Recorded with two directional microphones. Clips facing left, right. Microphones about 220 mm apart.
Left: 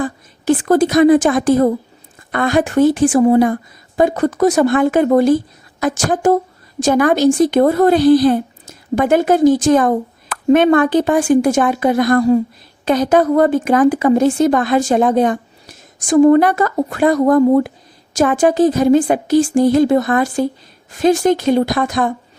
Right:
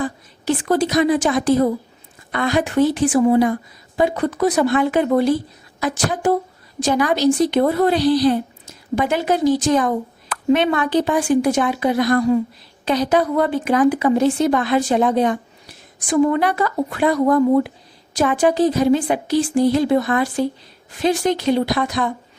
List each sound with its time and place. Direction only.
0.0 s a woman's voice: 50° left (ahead or behind)